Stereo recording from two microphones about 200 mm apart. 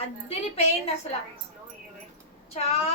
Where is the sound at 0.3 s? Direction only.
30° left (ahead or behind).